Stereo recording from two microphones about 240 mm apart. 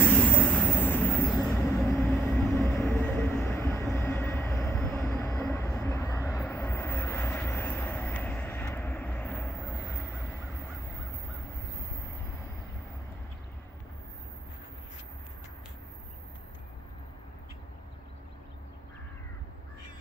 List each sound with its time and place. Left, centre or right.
0.0 s vehicle: centre
1.6 s train: centre
2.0 s vehicle: centre
2.6 s train: centre
5.4 s vehicle: centre